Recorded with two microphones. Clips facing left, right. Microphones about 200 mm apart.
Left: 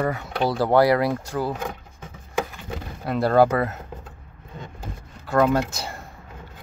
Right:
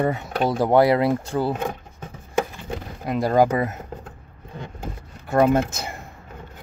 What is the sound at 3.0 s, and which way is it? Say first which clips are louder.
Speech: left 1 dB; 15° right (ahead or behind).